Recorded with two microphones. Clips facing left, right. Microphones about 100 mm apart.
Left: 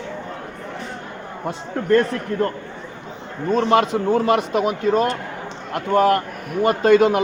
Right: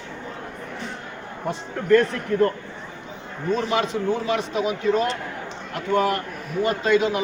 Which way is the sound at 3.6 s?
55° left (ahead or behind).